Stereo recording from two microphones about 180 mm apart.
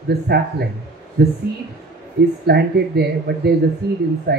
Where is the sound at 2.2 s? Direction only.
65° right (ahead or behind).